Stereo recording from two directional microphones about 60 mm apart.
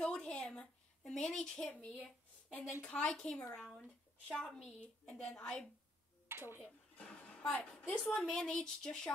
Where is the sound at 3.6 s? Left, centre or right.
Centre.